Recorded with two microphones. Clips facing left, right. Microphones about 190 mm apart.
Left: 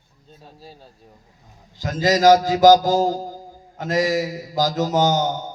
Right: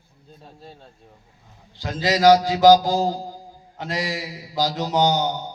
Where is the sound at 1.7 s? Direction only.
45° left (ahead or behind).